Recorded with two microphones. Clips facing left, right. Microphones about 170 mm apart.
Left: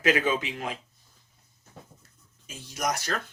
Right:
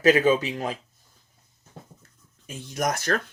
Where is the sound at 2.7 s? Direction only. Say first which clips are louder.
Right 4 dB; 50° right (ahead or behind).